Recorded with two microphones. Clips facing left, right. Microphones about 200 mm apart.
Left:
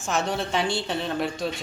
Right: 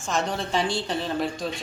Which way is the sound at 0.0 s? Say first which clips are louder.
Left 1 dB; 5° left (ahead or behind).